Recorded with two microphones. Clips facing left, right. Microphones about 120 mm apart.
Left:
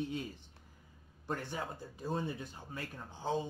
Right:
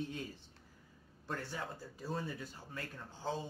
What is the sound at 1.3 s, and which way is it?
Speech, 20° left (ahead or behind).